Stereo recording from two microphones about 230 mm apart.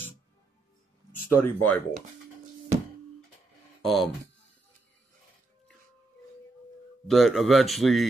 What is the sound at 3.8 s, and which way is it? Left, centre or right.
Speech, centre.